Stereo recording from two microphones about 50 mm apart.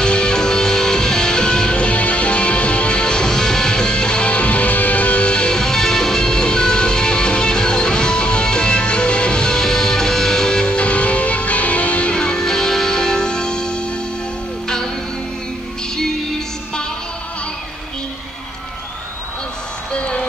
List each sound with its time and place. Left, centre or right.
0.0 s music: centre
19.9 s music: left